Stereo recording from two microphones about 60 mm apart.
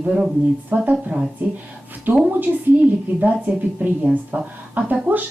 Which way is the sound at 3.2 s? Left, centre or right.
Right.